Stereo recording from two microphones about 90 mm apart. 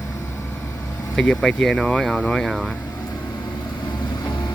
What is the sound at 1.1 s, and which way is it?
Speech, 10° left (ahead or behind).